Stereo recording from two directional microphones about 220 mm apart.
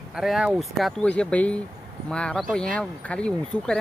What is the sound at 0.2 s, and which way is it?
Speech, centre (ahead or behind).